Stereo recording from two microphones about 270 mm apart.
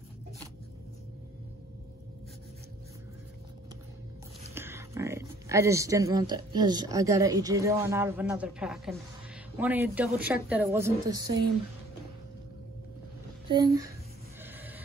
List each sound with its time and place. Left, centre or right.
4.6 s a woman's voice: centre
13.5 s speech: centre